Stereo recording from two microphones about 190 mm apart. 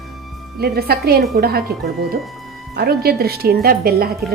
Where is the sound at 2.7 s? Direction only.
55° right (ahead or behind).